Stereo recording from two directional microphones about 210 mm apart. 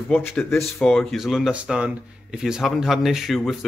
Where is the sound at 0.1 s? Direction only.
10° left (ahead or behind).